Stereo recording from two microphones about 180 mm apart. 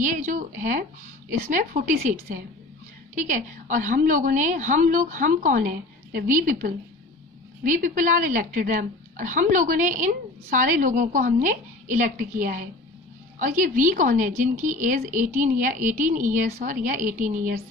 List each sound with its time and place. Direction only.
0.0 s a woman's voice: 45° right (ahead or behind)
3.2 s a woman's voice: 45° right (ahead or behind)